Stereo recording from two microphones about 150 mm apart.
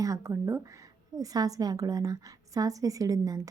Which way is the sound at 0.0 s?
20° right (ahead or behind).